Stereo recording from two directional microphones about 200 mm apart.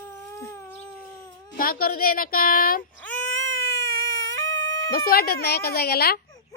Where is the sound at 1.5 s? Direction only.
45° left (ahead or behind).